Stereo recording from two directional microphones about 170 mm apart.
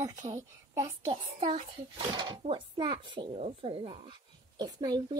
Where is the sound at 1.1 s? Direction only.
35° right (ahead or behind).